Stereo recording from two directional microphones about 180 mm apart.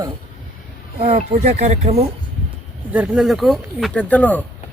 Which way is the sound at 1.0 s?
40° right (ahead or behind).